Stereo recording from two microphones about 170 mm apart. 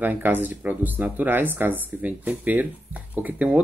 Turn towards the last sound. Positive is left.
turn(degrees=-10)  # may be behind; listen again after turning